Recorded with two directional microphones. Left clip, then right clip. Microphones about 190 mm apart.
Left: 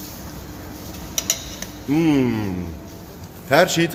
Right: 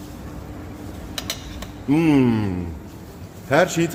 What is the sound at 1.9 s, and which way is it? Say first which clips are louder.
Speech: right 1 dB; 20° right (ahead or behind).